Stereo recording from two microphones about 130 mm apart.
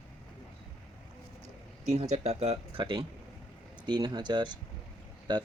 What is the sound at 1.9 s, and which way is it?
Speech, 60° right (ahead or behind).